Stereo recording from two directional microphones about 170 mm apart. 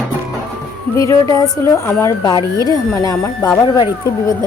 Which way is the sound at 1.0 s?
20° left (ahead or behind).